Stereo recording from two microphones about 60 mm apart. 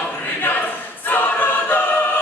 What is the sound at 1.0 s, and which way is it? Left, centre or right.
Choir, left.